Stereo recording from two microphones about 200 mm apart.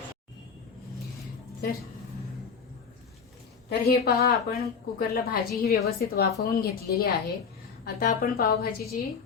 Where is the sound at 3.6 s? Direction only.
50° left (ahead or behind).